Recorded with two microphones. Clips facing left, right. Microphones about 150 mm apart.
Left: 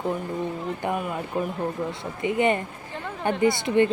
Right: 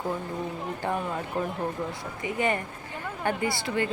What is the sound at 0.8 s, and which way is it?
Speech, 10° left (ahead or behind).